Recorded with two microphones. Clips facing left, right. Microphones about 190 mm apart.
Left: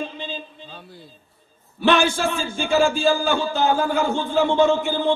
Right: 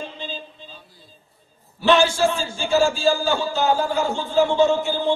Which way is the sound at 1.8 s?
55° left (ahead or behind).